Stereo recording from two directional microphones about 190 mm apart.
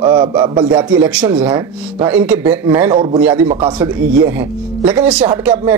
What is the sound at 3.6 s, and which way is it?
Speech, 20° right (ahead or behind).